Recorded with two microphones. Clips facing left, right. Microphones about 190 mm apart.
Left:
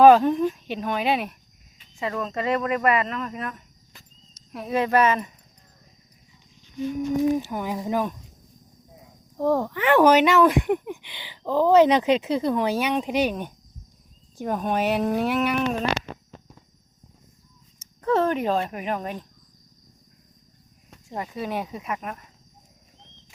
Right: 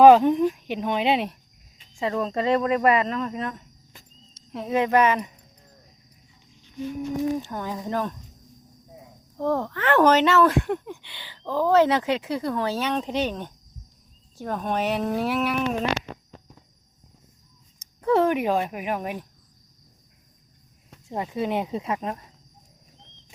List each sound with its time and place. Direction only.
0.0 s speech: 15° right (ahead or behind)
7.3 s speech: 10° left (ahead or behind)
9.4 s speech: 10° left (ahead or behind)
17.7 s speech: 10° right (ahead or behind)
21.1 s speech: 20° right (ahead or behind)